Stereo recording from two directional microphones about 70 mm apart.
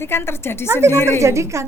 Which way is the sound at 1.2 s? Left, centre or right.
Right.